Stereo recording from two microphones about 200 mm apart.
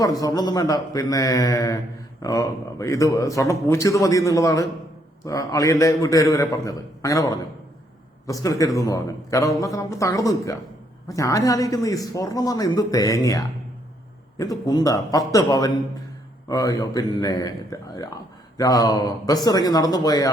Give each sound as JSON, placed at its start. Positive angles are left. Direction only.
{"t": 0.0, "sound": "a man's voice", "side_deg": 20}